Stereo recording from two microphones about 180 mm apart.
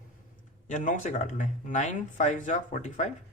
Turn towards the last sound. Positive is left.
turn(degrees=45)  # may be behind; listen again after turning